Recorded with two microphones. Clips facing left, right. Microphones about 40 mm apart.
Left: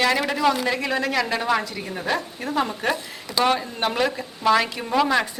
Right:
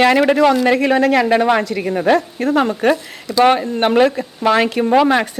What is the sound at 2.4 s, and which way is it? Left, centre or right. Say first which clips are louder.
Speech: right 9 dB; right.